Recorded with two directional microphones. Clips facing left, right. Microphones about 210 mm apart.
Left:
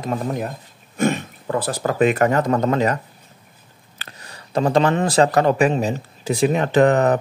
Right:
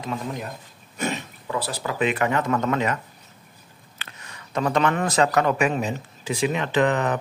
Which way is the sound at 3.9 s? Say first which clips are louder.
Left 3 dB; 35° left (ahead or behind).